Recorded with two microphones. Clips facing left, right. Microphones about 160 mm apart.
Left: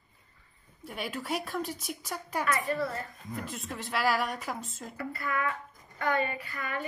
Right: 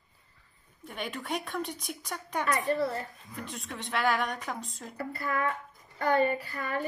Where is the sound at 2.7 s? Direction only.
30° right (ahead or behind).